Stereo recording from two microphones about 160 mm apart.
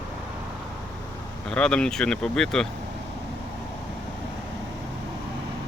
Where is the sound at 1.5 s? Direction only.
5° left (ahead or behind).